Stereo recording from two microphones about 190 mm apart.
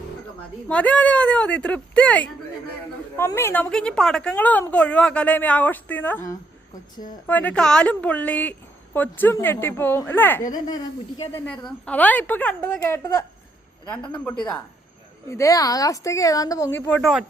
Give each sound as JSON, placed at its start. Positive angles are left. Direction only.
{"t": 0.7, "sound": "a woman's voice", "side_deg": 5}
{"t": 15.3, "sound": "a woman's voice", "side_deg": 15}